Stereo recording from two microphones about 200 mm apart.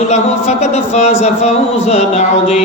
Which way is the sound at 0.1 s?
35° left (ahead or behind).